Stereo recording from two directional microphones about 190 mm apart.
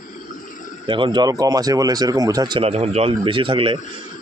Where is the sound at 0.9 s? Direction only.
25° right (ahead or behind).